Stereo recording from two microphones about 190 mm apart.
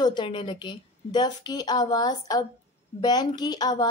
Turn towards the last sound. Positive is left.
turn(degrees=20)  # may be behind; listen again after turning